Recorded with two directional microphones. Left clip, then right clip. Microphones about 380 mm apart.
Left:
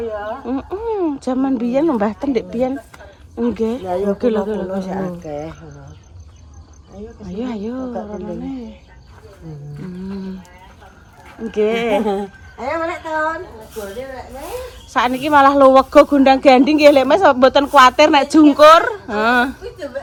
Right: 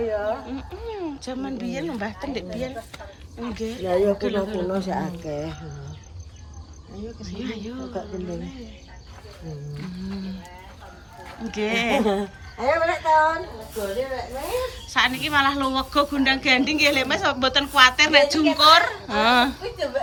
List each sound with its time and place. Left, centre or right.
0.0 s speech: centre
4.9 s speech: centre
7.2 s speech: centre
9.8 s music: centre
11.4 s a woman's voice: centre